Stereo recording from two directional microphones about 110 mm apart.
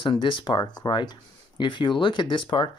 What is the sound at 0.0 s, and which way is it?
Speech, 45° left (ahead or behind).